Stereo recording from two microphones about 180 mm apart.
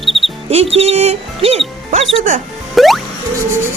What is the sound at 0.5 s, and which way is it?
Speech, 35° right (ahead or behind).